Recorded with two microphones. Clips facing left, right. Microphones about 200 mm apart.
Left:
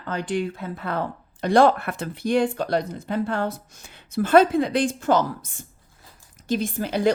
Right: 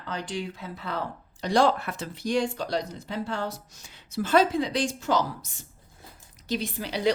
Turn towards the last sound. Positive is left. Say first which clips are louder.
# left 6 dB
turn(degrees=50)  # may be behind; listen again after turning